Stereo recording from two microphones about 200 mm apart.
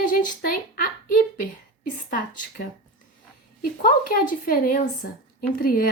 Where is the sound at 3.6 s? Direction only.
45° left (ahead or behind).